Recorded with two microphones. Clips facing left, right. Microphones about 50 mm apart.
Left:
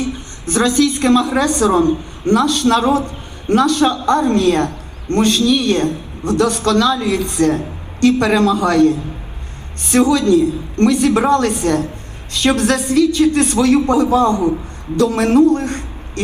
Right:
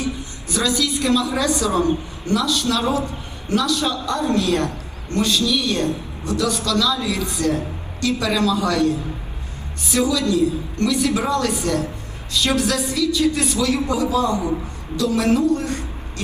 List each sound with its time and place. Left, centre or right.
0.0 s a woman's voice: left